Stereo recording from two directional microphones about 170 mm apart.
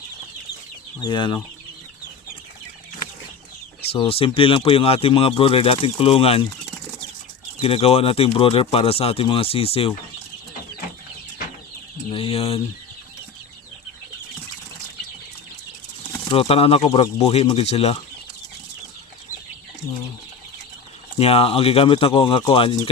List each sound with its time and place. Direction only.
1.0 s chicken: 25° left (ahead or behind)
3.9 s speech: 35° left (ahead or behind)
7.6 s speech: 35° left (ahead or behind)
12.1 s speech: 35° left (ahead or behind)
16.3 s speech: 35° left (ahead or behind)
21.2 s speech: 35° left (ahead or behind)